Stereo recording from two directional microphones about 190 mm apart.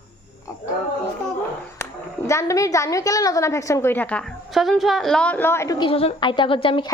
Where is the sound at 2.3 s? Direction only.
15° left (ahead or behind).